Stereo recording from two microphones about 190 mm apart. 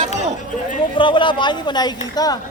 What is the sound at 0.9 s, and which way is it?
Speech, 25° left (ahead or behind).